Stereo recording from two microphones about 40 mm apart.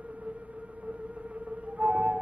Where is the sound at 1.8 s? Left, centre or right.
Right.